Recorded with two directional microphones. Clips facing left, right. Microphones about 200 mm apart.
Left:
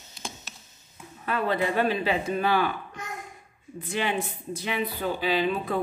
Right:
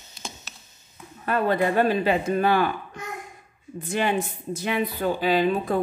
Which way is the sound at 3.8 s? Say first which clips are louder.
Right 4 dB; 45° right (ahead or behind).